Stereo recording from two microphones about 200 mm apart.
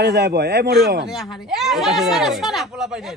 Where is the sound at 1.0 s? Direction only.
Centre (ahead or behind).